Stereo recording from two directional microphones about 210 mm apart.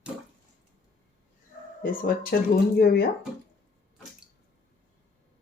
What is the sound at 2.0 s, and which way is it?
Speech, 45° left (ahead or behind).